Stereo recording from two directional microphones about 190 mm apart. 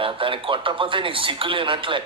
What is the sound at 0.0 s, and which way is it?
A man's voice, 25° right (ahead or behind).